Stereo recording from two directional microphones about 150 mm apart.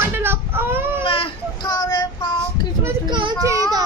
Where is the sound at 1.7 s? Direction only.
25° left (ahead or behind).